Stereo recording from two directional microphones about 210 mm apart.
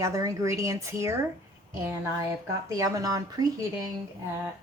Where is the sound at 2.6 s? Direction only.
15° right (ahead or behind).